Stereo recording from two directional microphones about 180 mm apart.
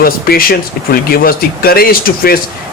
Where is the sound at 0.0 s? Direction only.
55° left (ahead or behind).